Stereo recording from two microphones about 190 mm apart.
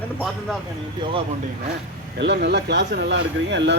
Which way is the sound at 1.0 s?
25° right (ahead or behind).